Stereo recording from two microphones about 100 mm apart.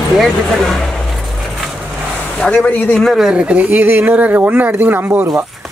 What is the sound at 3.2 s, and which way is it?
Speech, 10° right (ahead or behind).